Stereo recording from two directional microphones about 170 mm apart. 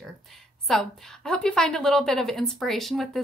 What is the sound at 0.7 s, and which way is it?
A woman's voice, centre (ahead or behind).